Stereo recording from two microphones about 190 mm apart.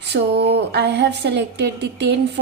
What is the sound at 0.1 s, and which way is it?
Speech, 55° right (ahead or behind).